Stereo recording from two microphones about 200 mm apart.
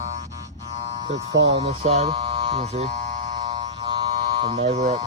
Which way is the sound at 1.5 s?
30° right (ahead or behind).